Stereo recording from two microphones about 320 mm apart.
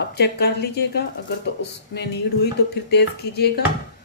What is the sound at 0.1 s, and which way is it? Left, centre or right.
A woman's voice, left.